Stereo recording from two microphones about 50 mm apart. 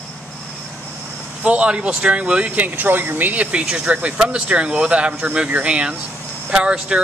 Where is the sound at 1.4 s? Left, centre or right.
Right.